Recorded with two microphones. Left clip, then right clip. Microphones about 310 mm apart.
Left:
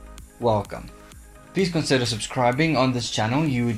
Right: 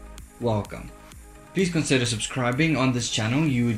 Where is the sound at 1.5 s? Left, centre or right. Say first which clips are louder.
Left 1 dB; centre.